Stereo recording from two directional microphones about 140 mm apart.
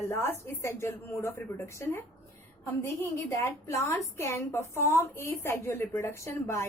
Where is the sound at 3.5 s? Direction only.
20° left (ahead or behind).